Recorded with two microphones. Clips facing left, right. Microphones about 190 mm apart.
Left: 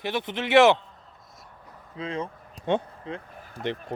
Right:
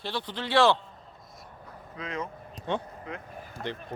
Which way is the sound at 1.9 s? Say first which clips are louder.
Left 4 dB; 30° left (ahead or behind).